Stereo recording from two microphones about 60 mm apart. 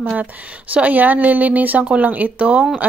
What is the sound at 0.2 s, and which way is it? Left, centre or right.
Speech, right.